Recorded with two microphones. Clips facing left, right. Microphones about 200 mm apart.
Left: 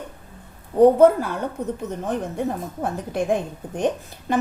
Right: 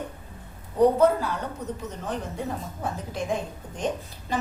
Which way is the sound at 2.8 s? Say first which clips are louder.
Left 8 dB; 55° left (ahead or behind).